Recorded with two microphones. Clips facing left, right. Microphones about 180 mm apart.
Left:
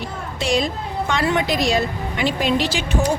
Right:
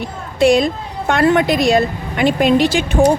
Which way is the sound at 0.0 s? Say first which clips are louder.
Right 11 dB; 55° right (ahead or behind).